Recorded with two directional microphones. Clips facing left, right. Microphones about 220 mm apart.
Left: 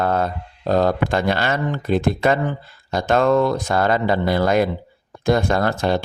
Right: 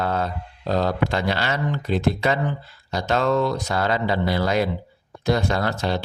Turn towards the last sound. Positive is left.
turn(degrees=50)  # may be behind; listen again after turning